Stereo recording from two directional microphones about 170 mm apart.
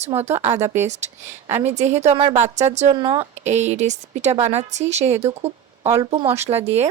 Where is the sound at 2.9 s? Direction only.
25° right (ahead or behind).